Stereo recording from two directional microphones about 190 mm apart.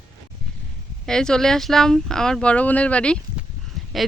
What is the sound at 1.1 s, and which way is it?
Speech, 5° left (ahead or behind).